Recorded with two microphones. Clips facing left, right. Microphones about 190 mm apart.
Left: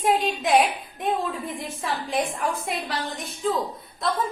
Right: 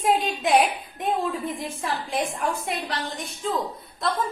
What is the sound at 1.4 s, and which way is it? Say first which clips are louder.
A woman's voice: right 1 dB; centre (ahead or behind).